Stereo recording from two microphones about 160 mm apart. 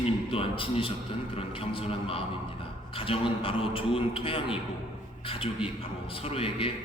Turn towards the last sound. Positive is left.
turn(degrees=35)  # may be behind; listen again after turning